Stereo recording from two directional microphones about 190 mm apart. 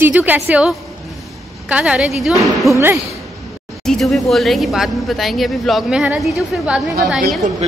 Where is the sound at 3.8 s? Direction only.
Centre (ahead or behind).